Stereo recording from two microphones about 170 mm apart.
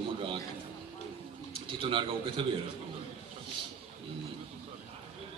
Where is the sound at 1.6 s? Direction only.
30° right (ahead or behind).